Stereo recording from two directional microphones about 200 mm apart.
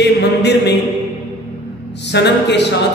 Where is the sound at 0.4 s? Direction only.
55° left (ahead or behind).